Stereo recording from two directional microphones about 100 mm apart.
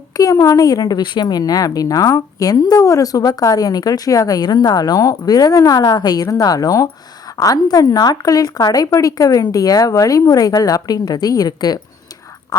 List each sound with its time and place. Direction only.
0.1 s a woman's voice: 35° left (ahead or behind)